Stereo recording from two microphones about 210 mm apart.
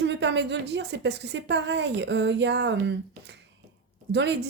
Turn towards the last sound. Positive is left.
turn(degrees=-55)  # may be behind; listen again after turning